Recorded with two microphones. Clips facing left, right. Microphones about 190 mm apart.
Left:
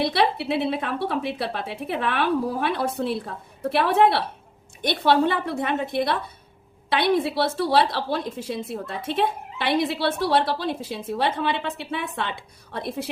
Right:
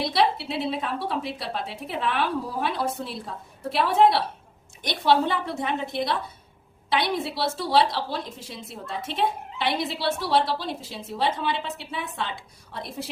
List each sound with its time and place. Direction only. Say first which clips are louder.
0.0 s a woman's voice: left 1 dB; 60° left (ahead or behind)